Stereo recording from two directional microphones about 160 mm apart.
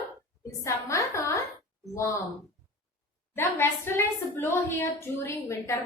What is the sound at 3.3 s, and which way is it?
A woman's voice, 15° left (ahead or behind).